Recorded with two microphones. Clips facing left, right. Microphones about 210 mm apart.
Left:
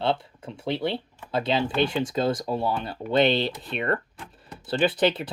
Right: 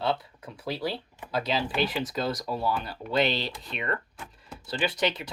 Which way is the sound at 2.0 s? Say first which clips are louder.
Left 5 dB; 25° left (ahead or behind).